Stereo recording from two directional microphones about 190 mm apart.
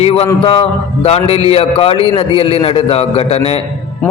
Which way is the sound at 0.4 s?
30° left (ahead or behind).